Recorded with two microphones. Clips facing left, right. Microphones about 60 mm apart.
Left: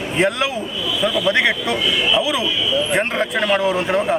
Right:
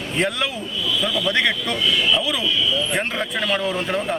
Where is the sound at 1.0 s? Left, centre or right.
Centre.